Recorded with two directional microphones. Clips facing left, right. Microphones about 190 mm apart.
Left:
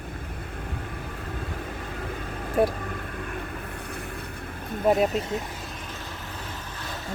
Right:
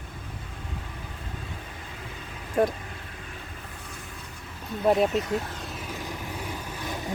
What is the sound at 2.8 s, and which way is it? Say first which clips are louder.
Vehicle: left 8 dB; 55° left (ahead or behind).